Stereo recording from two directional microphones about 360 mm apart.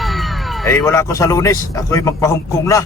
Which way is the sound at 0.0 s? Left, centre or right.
Centre.